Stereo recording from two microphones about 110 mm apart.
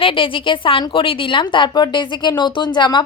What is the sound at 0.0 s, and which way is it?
A woman's voice, 50° left (ahead or behind).